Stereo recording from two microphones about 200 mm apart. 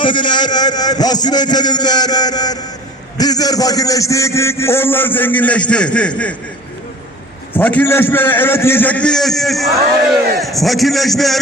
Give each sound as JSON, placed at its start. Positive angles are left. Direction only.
{"t": 0.0, "sound": "a man's voice", "side_deg": 25}
{"t": 7.5, "sound": "a man's voice", "side_deg": 5}